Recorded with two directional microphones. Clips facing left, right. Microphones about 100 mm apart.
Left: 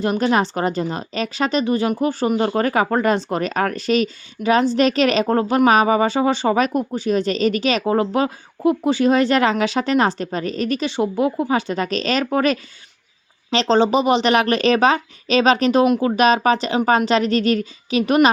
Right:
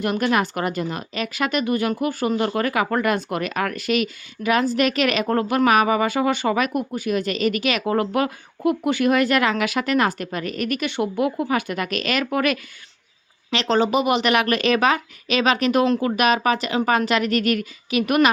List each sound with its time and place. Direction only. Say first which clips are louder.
0.0 s a woman's voice: left 3 dB; 25° left (ahead or behind)
15.8 s a woman's voice: left 4 dB; 20° left (ahead or behind)